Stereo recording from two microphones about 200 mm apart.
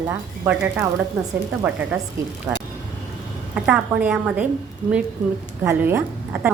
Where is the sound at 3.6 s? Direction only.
5° right (ahead or behind).